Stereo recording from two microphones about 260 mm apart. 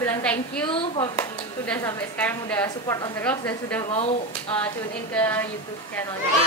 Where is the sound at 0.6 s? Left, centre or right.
Centre.